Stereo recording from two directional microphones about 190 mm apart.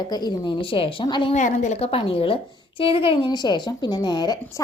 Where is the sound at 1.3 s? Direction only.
40° left (ahead or behind); by 4.4 s 20° left (ahead or behind).